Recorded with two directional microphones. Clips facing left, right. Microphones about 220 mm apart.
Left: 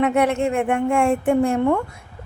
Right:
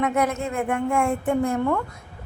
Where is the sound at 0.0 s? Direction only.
30° left (ahead or behind).